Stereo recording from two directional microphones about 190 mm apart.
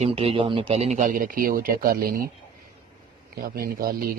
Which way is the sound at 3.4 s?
50° right (ahead or behind).